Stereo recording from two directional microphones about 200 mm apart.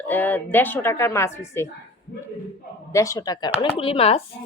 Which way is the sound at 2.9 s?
15° left (ahead or behind).